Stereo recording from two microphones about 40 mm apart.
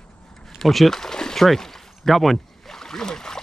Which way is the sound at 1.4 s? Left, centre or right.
Centre.